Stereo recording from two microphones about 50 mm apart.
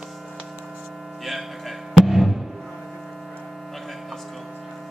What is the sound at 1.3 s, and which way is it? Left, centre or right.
Music, centre.